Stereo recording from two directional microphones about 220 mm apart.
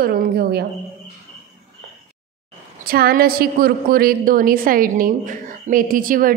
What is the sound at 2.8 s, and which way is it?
A woman's voice, 45° right (ahead or behind).